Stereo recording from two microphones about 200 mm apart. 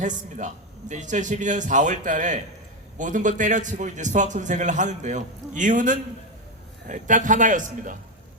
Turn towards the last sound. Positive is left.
turn(degrees=-40)  # may be behind; listen again after turning